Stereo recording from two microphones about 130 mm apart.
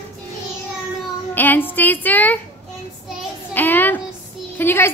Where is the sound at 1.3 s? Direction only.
15° left (ahead or behind).